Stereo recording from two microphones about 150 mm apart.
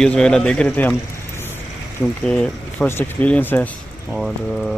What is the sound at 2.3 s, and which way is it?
Speech, 10° left (ahead or behind).